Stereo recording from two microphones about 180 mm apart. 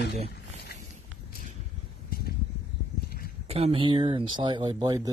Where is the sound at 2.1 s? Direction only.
55° left (ahead or behind).